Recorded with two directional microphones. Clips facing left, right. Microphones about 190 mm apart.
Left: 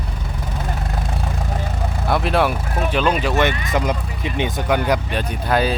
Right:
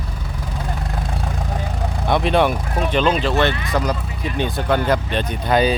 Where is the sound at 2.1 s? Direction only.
5° left (ahead or behind).